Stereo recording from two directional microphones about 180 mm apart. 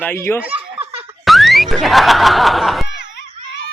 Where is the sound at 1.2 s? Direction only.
Centre (ahead or behind).